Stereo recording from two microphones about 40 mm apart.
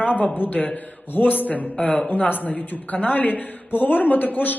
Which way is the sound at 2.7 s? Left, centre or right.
Left.